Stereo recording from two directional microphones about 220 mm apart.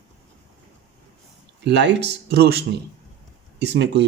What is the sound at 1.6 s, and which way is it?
Speech, 50° right (ahead or behind).